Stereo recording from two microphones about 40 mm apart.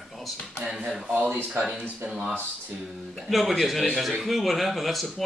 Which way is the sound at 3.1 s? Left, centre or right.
Centre.